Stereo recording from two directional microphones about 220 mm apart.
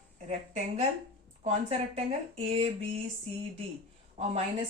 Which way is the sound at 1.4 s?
30° right (ahead or behind).